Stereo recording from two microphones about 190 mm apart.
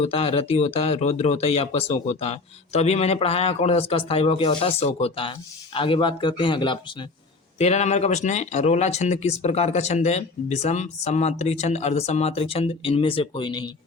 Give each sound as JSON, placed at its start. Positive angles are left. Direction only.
{"t": 0.0, "sound": "speech", "side_deg": 30}
{"t": 7.6, "sound": "speech", "side_deg": 35}